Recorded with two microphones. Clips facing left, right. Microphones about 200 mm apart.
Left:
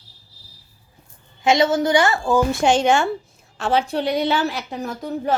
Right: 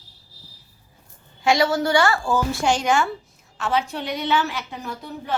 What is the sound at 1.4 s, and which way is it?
A woman's voice, 20° left (ahead or behind).